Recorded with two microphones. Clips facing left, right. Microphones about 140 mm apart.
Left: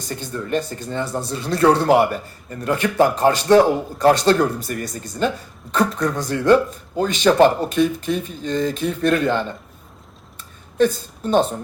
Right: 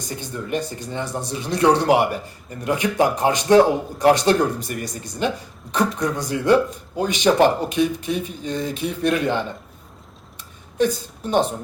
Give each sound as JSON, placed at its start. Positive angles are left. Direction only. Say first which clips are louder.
{"t": 0.1, "sound": "speech", "louder": "left 3 dB", "side_deg": -15}
{"t": 10.8, "sound": "a woman's voice", "louder": "left 3 dB", "side_deg": -15}